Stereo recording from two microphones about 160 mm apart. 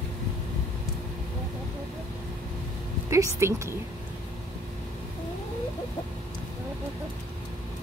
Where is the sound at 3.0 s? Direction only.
20° right (ahead or behind).